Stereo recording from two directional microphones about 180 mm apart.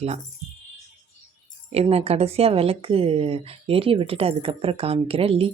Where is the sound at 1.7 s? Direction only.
35° right (ahead or behind).